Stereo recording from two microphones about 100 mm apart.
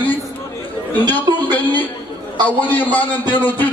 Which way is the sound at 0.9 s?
20° left (ahead or behind).